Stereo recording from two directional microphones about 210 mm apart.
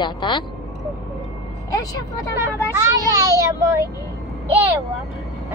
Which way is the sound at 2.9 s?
15° right (ahead or behind).